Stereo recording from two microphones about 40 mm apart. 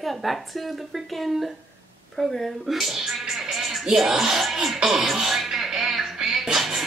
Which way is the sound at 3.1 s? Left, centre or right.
Centre.